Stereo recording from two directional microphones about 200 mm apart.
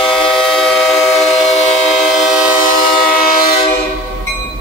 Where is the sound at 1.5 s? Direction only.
35° left (ahead or behind).